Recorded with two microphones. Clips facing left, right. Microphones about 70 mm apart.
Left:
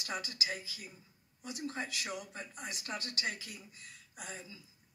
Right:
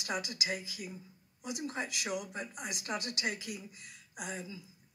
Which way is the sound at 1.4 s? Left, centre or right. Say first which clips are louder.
Right 2 dB; centre.